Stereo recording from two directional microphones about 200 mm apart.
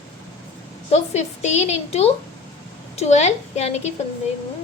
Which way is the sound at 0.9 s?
35° left (ahead or behind).